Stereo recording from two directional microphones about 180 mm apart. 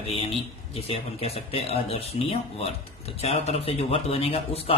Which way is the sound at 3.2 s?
35° left (ahead or behind).